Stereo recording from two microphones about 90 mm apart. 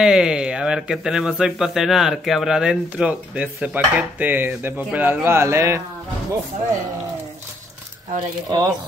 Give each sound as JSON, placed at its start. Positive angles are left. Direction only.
{"t": 0.0, "sound": "speech", "side_deg": -5}
{"t": 8.5, "sound": "speech", "side_deg": -50}